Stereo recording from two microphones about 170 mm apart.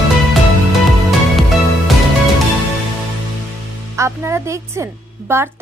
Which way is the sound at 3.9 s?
15° right (ahead or behind).